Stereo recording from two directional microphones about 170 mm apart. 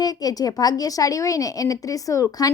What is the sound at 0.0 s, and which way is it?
Speech, 20° left (ahead or behind).